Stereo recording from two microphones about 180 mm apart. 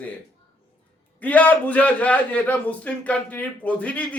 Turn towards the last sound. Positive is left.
turn(degrees=10)  # may be behind; listen again after turning